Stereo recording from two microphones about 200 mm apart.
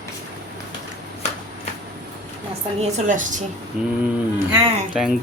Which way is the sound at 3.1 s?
40° right (ahead or behind).